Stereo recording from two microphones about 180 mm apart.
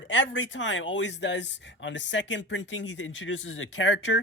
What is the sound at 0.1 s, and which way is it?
Speech, 90° left.